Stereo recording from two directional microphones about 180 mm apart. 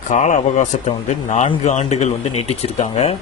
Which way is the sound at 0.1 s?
45° left (ahead or behind).